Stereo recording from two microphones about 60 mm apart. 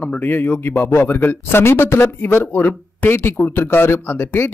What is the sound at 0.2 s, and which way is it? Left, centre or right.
A man's voice, left.